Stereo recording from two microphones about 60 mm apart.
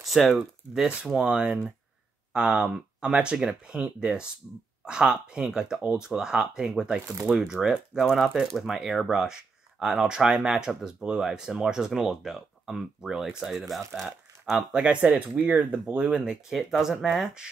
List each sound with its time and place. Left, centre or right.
0.0 s speech: centre
0.7 s speech: centre
14.7 s speech: centre
15.0 s speech: right
16.4 s speech: centre